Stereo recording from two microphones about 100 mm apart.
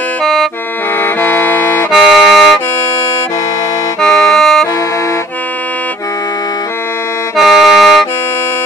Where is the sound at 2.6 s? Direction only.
20° left (ahead or behind).